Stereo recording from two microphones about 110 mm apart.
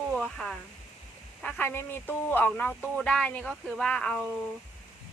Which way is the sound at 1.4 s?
15° left (ahead or behind).